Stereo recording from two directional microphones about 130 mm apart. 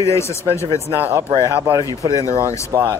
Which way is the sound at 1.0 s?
20° right (ahead or behind).